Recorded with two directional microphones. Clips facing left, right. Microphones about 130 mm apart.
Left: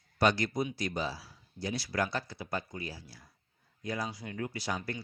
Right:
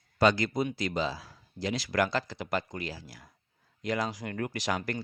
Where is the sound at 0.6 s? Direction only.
90° right.